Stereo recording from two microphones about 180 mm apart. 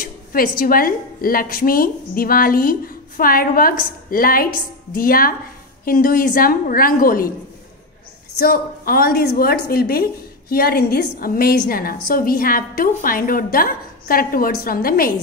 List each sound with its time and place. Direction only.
0.0 s a woman's voice: 55° left (ahead or behind)
8.4 s a woman's voice: 55° left (ahead or behind)